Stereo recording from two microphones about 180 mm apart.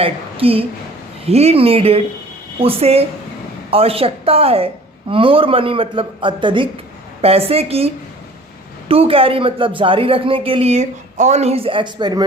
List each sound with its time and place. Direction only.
0.0 s a woman's voice: 30° right (ahead or behind)